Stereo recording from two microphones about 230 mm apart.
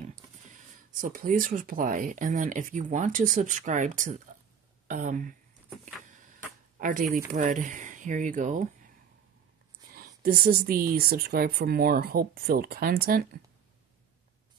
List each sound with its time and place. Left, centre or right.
1.0 s speech: right
6.8 s speech: right
9.9 s speech: right